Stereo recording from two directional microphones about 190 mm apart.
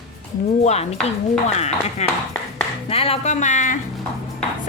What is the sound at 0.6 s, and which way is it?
Speech, 35° left (ahead or behind).